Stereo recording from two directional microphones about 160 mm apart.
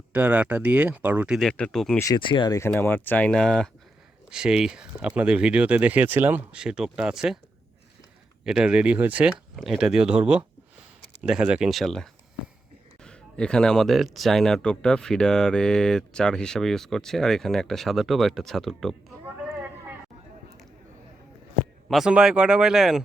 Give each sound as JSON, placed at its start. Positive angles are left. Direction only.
{"t": 0.1, "sound": "speech", "side_deg": -10}
{"t": 1.4, "sound": "speech", "side_deg": 5}
{"t": 2.0, "sound": "speech", "side_deg": 25}
{"t": 2.6, "sound": "speech", "side_deg": 15}
{"t": 8.4, "sound": "speech", "side_deg": -5}
{"t": 21.8, "sound": "speech", "side_deg": 0}